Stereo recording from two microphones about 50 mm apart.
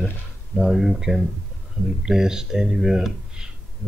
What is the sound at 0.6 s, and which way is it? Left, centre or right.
Speech, centre.